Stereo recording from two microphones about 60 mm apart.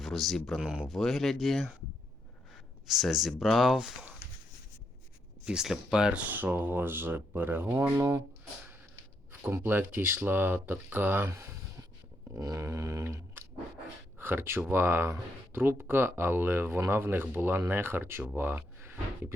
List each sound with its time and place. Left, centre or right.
0.0 s speech: centre
0.6 s speech: centre
0.9 s speech: centre
2.8 s speech: centre
5.5 s speech: centre
6.3 s speech: right
7.9 s speech: right
9.3 s speech: right
11.3 s a sound: right
14.2 s speech: right